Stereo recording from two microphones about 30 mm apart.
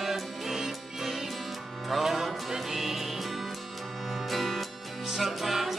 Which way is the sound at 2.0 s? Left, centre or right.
Centre.